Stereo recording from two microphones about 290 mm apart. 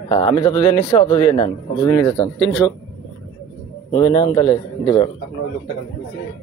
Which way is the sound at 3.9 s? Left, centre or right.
Centre.